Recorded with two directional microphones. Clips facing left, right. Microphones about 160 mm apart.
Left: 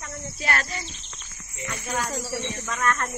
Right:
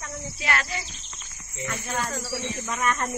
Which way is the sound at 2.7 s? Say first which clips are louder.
Left 1 dB; 15° right (ahead or behind).